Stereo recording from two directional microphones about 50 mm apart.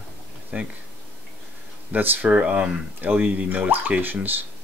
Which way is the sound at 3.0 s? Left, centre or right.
Right.